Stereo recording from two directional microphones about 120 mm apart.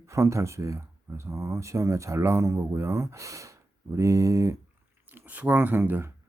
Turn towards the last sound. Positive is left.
turn(degrees=-20)  # may be behind; listen again after turning